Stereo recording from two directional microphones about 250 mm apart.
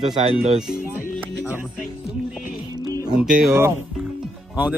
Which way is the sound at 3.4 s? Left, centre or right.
Centre.